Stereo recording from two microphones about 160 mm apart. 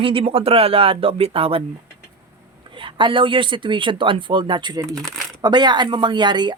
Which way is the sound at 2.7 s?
30° right (ahead or behind).